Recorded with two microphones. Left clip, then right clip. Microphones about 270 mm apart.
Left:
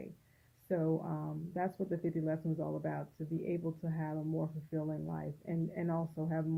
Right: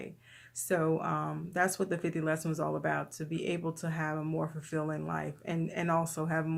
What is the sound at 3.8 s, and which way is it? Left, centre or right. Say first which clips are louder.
Speech: right 6 dB; centre.